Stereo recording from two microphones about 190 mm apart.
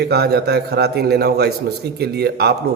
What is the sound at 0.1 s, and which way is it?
A man's voice, 60° right (ahead or behind).